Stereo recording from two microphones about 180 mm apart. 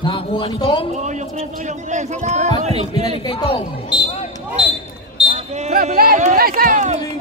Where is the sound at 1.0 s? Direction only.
40° right (ahead or behind).